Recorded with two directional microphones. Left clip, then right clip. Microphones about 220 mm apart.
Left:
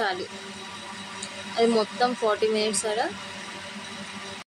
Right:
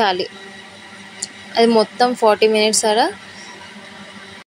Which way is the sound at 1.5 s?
35° right (ahead or behind).